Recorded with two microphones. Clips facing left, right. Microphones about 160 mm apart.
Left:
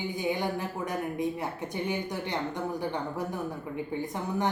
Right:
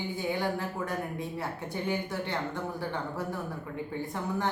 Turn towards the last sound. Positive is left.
turn(degrees=20)  # may be behind; listen again after turning